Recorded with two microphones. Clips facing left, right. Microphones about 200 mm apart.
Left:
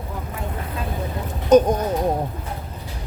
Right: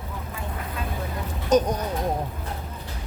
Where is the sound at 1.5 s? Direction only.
50° left (ahead or behind).